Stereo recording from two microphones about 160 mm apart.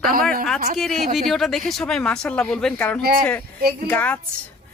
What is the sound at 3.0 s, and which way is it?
Speech, 75° right (ahead or behind).